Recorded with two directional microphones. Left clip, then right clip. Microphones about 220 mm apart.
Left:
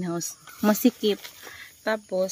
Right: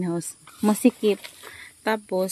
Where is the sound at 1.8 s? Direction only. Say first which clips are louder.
Right 1 dB; 40° right (ahead or behind).